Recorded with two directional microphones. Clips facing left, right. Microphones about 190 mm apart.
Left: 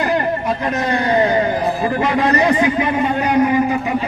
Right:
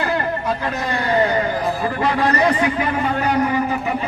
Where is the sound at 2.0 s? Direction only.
20° left (ahead or behind).